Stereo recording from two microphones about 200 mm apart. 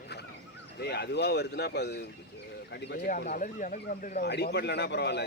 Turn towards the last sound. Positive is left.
turn(degrees=55)  # may be behind; listen again after turning